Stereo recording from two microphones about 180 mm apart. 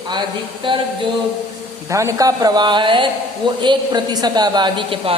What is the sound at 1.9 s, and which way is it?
A man's voice, 15° right (ahead or behind).